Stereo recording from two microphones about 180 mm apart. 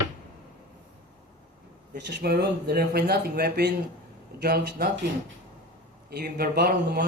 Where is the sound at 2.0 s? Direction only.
65° right (ahead or behind).